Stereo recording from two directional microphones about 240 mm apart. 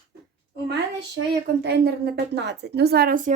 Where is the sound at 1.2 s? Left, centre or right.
Right.